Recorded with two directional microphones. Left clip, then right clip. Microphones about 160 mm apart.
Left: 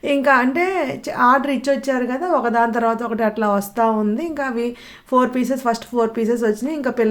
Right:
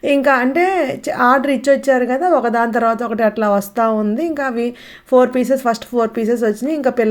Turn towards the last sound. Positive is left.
turn(degrees=-20)  # may be behind; listen again after turning